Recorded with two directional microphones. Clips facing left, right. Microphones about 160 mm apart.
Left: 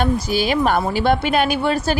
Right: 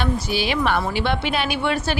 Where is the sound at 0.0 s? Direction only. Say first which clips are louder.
Left 4 dB; 45° left (ahead or behind).